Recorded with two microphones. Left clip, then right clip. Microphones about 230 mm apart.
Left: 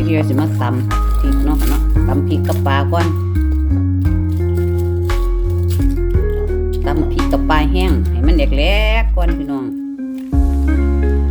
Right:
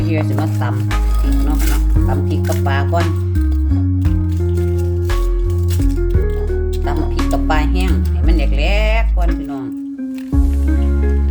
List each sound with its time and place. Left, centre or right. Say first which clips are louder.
2.0 s music: left 3 dB; left
7.3 s music: left 2 dB; left